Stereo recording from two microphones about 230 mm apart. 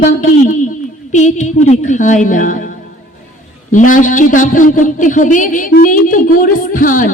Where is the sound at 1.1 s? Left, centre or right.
Left.